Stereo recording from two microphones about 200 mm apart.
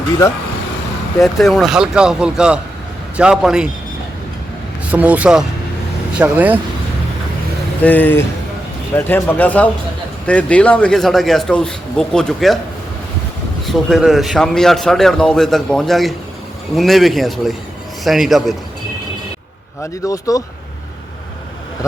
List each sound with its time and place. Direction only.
1.2 s a man's voice: centre (ahead or behind)
4.9 s speech: 5° right (ahead or behind)
7.8 s a man's voice: 10° left (ahead or behind)
13.7 s a man's voice: centre (ahead or behind)
19.8 s a man's voice: 15° left (ahead or behind)